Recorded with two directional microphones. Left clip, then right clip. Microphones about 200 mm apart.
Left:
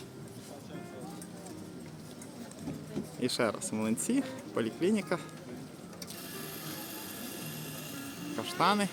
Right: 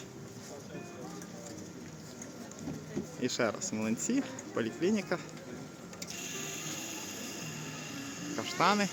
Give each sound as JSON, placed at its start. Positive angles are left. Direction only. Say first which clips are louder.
{"t": 3.2, "sound": "speech", "louder": "left 1 dB", "side_deg": 20}
{"t": 6.2, "sound": "vehicle", "louder": "right 3 dB", "side_deg": 40}
{"t": 7.9, "sound": "music", "louder": "even", "side_deg": 15}